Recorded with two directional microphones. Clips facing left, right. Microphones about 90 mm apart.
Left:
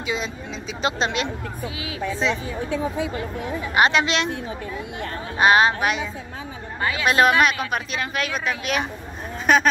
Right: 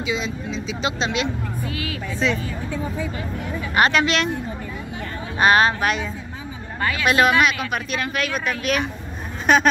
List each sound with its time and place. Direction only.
0.0 s speech: 45° left (ahead or behind)
2.1 s speech: 25° left (ahead or behind)
3.7 s speech: 20° left (ahead or behind)
5.4 s speech: 15° left (ahead or behind)
9.5 s a sound: 5° left (ahead or behind)